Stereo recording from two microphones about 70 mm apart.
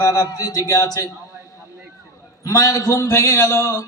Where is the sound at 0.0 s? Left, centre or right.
Left.